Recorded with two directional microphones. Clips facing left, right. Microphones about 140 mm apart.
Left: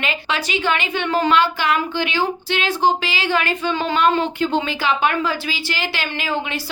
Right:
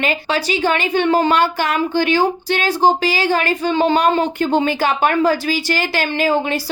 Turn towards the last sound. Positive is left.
turn(degrees=-40)  # may be behind; listen again after turning